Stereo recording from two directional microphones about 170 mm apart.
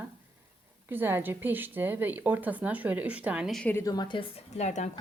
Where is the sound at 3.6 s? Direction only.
15° left (ahead or behind); by 4.9 s 45° left (ahead or behind).